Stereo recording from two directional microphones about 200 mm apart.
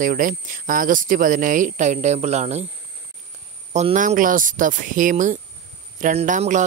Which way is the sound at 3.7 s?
35° right (ahead or behind).